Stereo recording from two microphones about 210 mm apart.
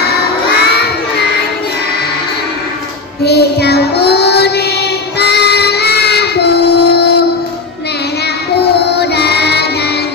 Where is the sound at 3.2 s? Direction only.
50° left (ahead or behind).